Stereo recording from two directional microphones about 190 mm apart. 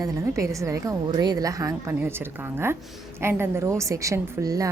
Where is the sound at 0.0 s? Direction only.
15° right (ahead or behind).